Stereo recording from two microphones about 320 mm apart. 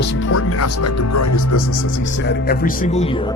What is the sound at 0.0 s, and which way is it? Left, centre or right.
Speech, left.